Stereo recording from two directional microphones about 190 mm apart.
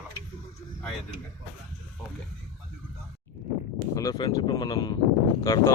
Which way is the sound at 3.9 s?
20° left (ahead or behind).